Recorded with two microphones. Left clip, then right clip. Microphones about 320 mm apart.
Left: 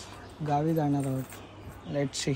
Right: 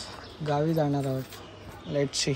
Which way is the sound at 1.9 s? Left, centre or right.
Centre.